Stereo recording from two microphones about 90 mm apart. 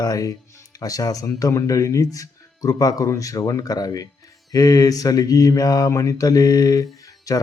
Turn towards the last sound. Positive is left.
turn(degrees=40)  # may be behind; listen again after turning